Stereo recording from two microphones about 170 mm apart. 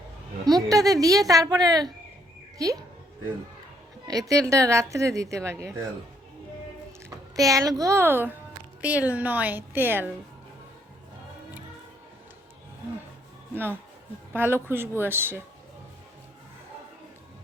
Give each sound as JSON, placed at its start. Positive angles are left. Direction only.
{"t": 0.4, "sound": "a child's voice", "side_deg": -20}
{"t": 4.0, "sound": "a woman's voice", "side_deg": -20}
{"t": 7.3, "sound": "a child's voice", "side_deg": -20}
{"t": 14.3, "sound": "a woman's voice", "side_deg": -15}